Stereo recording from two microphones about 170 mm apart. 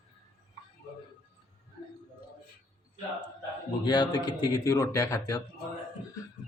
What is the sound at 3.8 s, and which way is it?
Speech, 25° left (ahead or behind).